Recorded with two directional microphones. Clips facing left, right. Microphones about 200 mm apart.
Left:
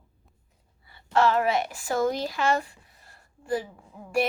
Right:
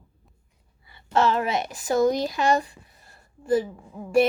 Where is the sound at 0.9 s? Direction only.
20° right (ahead or behind).